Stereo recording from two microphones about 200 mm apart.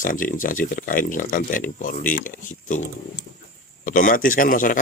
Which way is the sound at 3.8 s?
40° left (ahead or behind).